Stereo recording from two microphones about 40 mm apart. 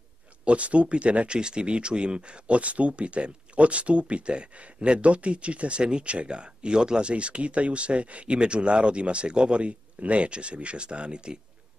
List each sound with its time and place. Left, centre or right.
0.5 s speech: right